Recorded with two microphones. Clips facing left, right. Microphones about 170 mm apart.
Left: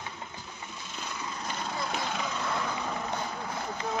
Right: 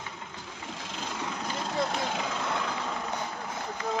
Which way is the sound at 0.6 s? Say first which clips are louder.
Right 5 dB; 90° right.